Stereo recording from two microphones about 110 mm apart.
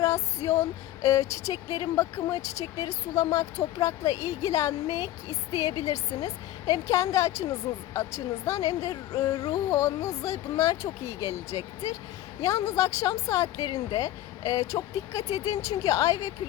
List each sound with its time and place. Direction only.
0.0 s speech: 30° left (ahead or behind)
12.4 s a woman's voice: 30° left (ahead or behind)